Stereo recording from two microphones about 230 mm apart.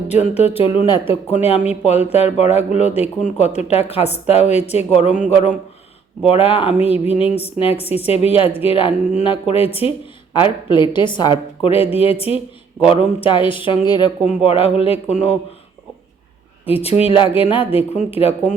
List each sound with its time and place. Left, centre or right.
0.1 s speech: left
16.6 s speech: left